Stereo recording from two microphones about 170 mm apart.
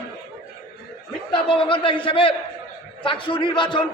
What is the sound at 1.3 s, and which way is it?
A man's voice, 30° left (ahead or behind).